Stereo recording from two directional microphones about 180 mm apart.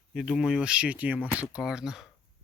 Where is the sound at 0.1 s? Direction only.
Centre (ahead or behind).